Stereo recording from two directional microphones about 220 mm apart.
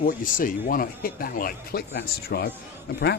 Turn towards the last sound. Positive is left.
turn(degrees=50)  # may be behind; listen again after turning